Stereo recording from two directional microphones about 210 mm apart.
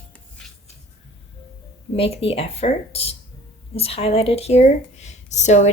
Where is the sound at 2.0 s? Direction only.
25° left (ahead or behind).